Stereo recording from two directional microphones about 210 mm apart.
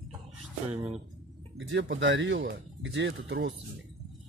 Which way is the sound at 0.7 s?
30° right (ahead or behind).